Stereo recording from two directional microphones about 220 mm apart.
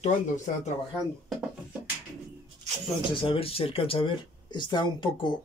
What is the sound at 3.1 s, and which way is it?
Speech, 25° left (ahead or behind).